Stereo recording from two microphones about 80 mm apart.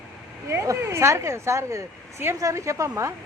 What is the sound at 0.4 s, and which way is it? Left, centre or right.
A woman's voice, right.